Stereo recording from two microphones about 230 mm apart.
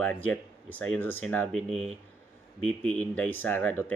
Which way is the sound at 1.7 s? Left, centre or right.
Right.